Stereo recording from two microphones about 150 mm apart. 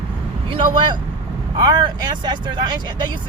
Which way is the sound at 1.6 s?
30° right (ahead or behind).